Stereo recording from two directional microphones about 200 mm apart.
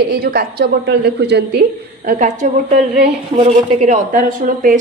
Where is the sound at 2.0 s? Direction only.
35° right (ahead or behind).